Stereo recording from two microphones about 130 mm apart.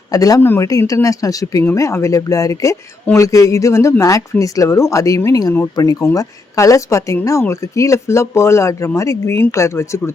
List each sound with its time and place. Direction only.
0.1 s speech: 25° left (ahead or behind)